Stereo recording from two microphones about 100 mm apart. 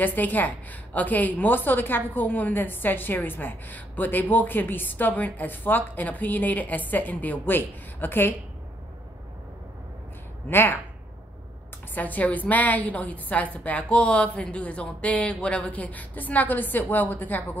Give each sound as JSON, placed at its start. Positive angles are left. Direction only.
{"t": 0.0, "sound": "a woman's voice", "side_deg": 20}
{"t": 10.5, "sound": "a woman's voice", "side_deg": 20}
{"t": 11.9, "sound": "a woman's voice", "side_deg": 15}